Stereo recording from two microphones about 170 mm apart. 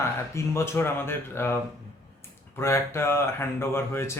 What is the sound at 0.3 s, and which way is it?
Speech, 15° left (ahead or behind).